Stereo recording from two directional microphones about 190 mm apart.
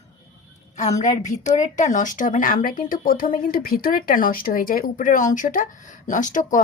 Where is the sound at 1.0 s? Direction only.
40° left (ahead or behind).